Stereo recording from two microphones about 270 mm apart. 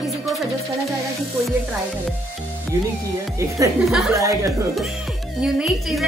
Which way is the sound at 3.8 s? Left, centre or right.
Centre.